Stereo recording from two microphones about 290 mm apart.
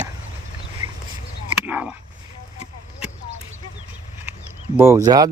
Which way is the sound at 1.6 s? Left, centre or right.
Centre.